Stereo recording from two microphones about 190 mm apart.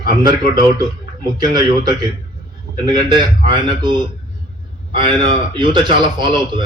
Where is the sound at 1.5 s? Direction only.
20° right (ahead or behind).